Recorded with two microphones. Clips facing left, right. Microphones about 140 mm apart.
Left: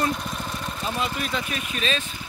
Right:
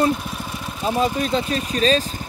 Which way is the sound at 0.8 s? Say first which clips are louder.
Right 9 dB; 35° right (ahead or behind).